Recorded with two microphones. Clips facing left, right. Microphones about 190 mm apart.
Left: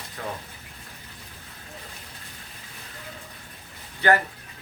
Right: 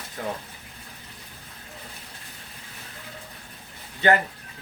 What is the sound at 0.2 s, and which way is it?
Speech, 20° right (ahead or behind).